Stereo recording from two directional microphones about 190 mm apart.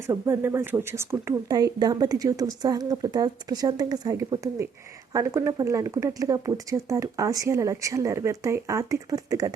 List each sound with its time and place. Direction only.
0.1 s speech: 15° right (ahead or behind)